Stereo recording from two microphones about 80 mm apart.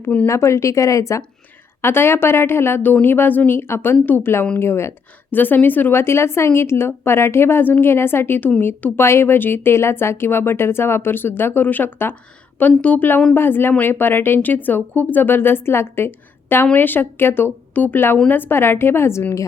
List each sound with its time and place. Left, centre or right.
0.3 s speech: left
1.8 s a woman's voice: left